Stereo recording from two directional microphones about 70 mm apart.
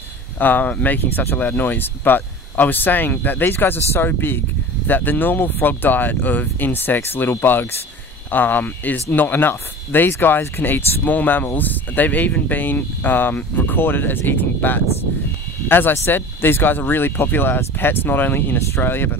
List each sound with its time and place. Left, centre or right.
0.4 s speech: left